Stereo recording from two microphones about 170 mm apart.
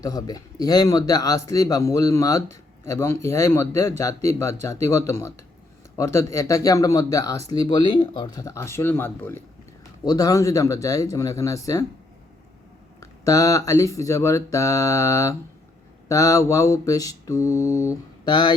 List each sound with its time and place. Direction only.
0.0 s speech: 20° left (ahead or behind)
6.0 s mantra: 15° left (ahead or behind)
13.0 s mantra: 20° left (ahead or behind)